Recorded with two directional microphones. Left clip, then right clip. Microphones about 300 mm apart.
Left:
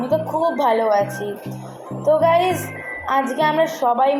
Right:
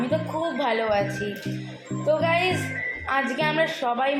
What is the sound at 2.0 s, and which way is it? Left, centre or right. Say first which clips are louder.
A woman's voice: left 7 dB; left.